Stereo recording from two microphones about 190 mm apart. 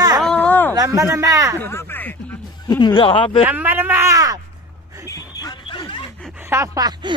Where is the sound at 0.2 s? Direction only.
5° left (ahead or behind).